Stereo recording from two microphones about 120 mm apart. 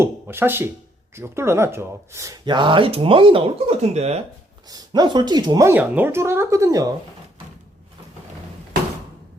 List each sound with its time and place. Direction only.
0.0 s speech: 20° right (ahead or behind)
2.4 s speech: 40° right (ahead or behind); by 4.2 s 65° right (ahead or behind)
4.7 s speech: 35° right (ahead or behind)
5.6 s speech: 15° right (ahead or behind)